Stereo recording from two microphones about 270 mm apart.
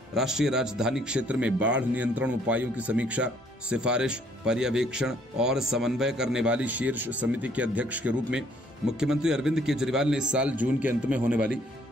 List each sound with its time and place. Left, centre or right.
0.1 s speech: centre